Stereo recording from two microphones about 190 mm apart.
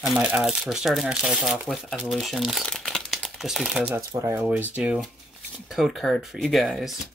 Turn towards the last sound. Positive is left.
turn(degrees=0)  # may be behind; listen again after turning